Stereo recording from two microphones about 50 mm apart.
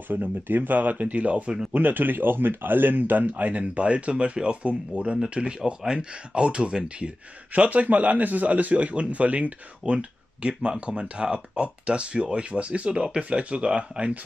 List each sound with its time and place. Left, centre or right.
0.1 s speech: right